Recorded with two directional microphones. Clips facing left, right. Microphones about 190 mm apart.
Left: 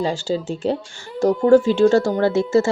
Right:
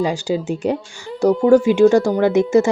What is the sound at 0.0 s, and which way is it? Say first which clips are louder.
Speech: right 2 dB; 15° right (ahead or behind).